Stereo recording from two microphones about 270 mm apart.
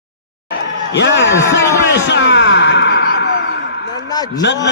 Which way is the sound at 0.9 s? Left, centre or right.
Left.